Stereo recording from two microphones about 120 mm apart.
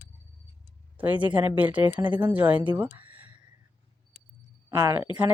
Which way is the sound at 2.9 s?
15° right (ahead or behind).